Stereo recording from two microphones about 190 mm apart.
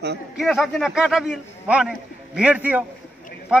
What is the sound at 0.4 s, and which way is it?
A man's voice, centre (ahead or behind).